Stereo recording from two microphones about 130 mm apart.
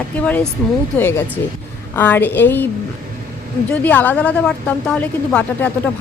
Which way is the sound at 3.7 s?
10° left (ahead or behind).